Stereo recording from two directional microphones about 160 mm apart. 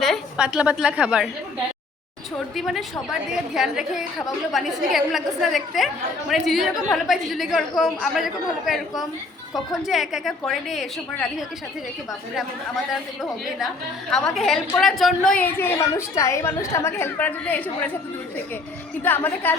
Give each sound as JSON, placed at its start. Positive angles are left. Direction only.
{"t": 0.0, "sound": "a woman's voice", "side_deg": 0}
{"t": 2.6, "sound": "a woman's voice", "side_deg": 0}
{"t": 12.4, "sound": "a woman's voice", "side_deg": 0}
{"t": 14.1, "sound": "a woman's voice", "side_deg": 0}
{"t": 15.5, "sound": "a woman's voice", "side_deg": 15}
{"t": 19.0, "sound": "a woman's voice", "side_deg": 10}